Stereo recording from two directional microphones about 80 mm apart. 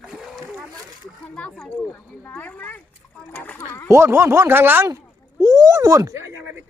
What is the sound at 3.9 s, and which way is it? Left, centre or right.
Speech, right.